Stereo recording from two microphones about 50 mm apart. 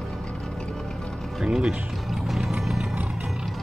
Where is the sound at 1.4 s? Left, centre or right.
Centre.